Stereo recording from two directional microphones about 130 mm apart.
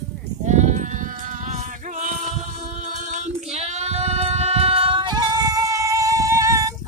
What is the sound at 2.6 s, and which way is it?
Child singing, 60° right (ahead or behind).